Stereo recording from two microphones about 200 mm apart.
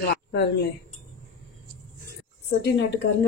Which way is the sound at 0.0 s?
55° left (ahead or behind).